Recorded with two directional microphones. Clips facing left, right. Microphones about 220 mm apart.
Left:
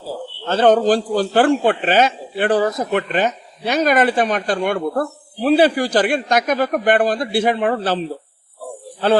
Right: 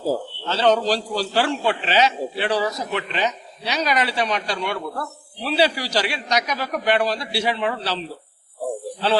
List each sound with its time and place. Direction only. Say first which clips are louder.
0.4 s a man's voice: left 6 dB; 50° left (ahead or behind)